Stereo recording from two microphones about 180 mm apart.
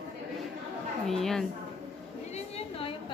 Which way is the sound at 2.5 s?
30° left (ahead or behind).